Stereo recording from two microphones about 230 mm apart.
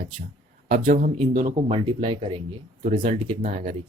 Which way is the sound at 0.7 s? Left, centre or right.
Right.